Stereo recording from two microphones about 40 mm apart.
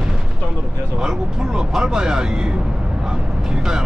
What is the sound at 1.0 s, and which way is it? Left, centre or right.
Speech, centre.